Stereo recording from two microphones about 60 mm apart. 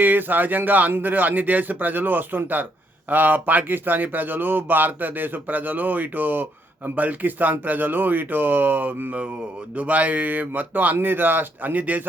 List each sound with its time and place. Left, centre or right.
0.0 s a man's voice: right